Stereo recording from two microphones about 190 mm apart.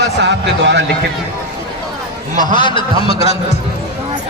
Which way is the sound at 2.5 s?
25° left (ahead or behind).